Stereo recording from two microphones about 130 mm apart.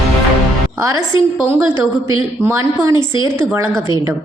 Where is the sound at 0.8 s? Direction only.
25° right (ahead or behind).